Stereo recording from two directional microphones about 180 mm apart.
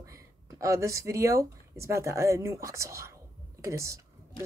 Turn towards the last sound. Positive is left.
turn(degrees=-15)  # may be behind; listen again after turning